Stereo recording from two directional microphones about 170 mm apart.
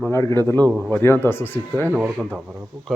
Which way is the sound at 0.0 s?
15° left (ahead or behind).